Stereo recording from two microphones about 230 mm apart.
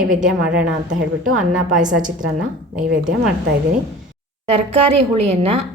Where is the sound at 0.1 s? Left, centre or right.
Centre.